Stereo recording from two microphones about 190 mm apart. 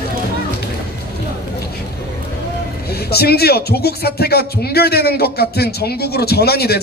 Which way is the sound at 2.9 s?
55° left (ahead or behind).